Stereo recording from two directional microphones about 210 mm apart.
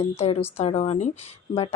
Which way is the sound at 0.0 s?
30° left (ahead or behind).